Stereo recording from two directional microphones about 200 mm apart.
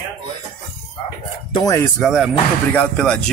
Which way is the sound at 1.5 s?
20° left (ahead or behind).